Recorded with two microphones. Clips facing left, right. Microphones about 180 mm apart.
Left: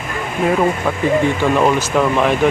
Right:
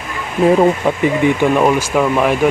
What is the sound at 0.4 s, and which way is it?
Speech, 30° right (ahead or behind).